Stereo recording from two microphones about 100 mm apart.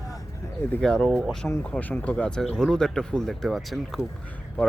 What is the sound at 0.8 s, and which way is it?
Speech, 10° left (ahead or behind).